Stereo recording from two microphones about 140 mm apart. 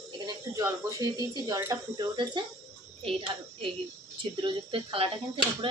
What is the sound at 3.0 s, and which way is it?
Speech, 40° right (ahead or behind).